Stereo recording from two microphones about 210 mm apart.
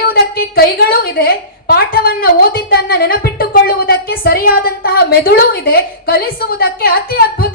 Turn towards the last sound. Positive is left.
turn(degrees=45)  # may be behind; listen again after turning